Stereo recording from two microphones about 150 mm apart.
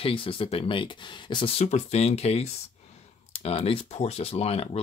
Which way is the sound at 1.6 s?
45° left (ahead or behind).